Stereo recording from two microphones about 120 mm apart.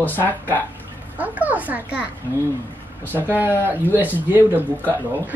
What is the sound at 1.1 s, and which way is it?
Speech, 15° right (ahead or behind).